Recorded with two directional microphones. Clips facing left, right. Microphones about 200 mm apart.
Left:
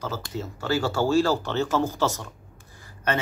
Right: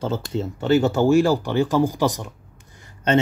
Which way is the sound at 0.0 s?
25° right (ahead or behind).